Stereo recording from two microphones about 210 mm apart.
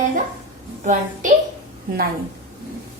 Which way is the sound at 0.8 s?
35° right (ahead or behind).